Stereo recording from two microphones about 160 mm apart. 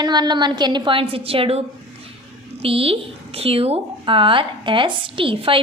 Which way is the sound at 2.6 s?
35° right (ahead or behind).